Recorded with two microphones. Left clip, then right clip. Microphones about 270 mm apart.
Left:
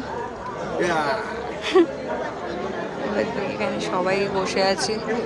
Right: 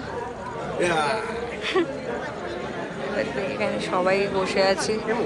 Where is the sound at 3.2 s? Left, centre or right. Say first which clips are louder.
Even; centre.